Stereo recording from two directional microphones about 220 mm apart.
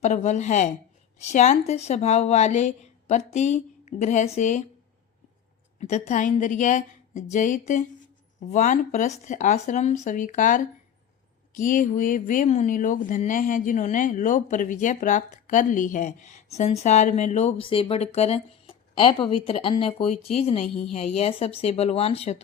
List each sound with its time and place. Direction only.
0.0 s speech: 30° left (ahead or behind)
5.8 s speech: 30° left (ahead or behind)